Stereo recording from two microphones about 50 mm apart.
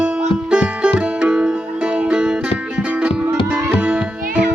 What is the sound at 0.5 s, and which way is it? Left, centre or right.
Music, right.